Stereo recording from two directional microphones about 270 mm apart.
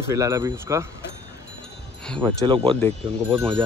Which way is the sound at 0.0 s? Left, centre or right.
Centre.